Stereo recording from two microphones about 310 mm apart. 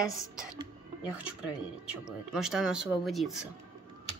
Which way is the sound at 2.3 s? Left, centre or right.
Centre.